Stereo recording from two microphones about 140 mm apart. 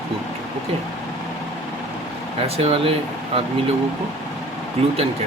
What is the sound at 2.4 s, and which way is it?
Speech, 40° right (ahead or behind).